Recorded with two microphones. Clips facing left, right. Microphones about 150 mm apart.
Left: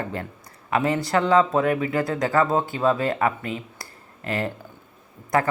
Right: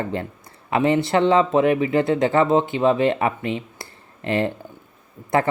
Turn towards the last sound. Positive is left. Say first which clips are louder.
# right 2 dB
turn(degrees=-25)  # may be behind; listen again after turning